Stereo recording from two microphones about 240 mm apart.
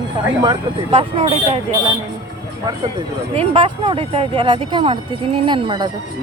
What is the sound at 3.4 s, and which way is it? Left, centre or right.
Speech, right.